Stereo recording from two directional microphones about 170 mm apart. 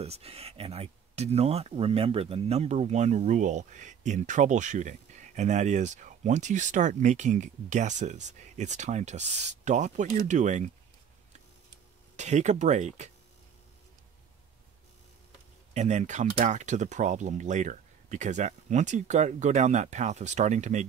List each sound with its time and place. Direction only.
0.0 s speech: 35° right (ahead or behind)
12.2 s speech: 45° right (ahead or behind)
15.7 s speech: 45° right (ahead or behind)